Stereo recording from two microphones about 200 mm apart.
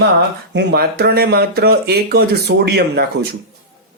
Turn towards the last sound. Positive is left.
turn(degrees=-55)  # may be behind; listen again after turning